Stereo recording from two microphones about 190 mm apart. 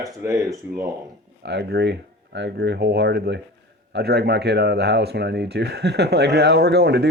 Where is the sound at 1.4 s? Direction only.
60° right (ahead or behind).